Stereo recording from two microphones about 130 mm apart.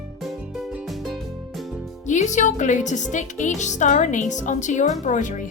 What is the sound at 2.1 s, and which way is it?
A woman's voice, 65° left (ahead or behind).